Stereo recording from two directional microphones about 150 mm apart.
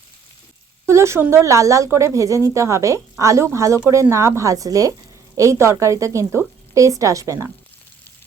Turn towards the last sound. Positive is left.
turn(degrees=-20)  # may be behind; listen again after turning